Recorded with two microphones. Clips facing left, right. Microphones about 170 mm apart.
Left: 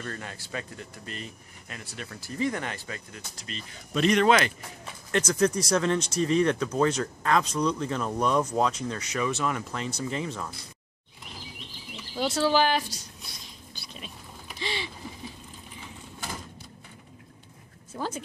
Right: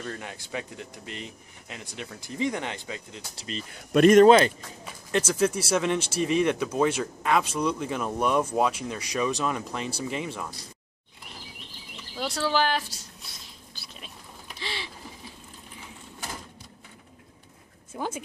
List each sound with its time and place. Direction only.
0.0 s speech: 10° right (ahead or behind)
3.9 s speech: 50° right (ahead or behind)
5.1 s speech: 10° right (ahead or behind)
12.2 s speech: centre (ahead or behind)
13.7 s a sound: centre (ahead or behind)
17.9 s speech: 10° right (ahead or behind)